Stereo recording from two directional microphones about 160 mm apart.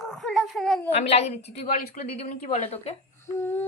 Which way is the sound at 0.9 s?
40° left (ahead or behind).